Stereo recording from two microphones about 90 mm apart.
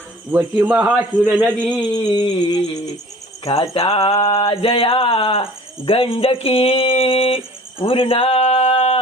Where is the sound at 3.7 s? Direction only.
85° left.